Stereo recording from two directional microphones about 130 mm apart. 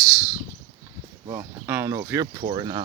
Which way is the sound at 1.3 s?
20° right (ahead or behind).